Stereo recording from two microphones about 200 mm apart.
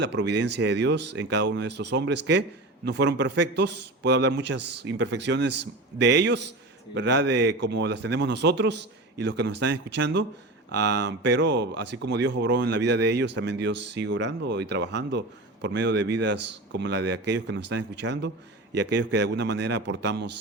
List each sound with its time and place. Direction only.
0.0 s speech: 60° right (ahead or behind)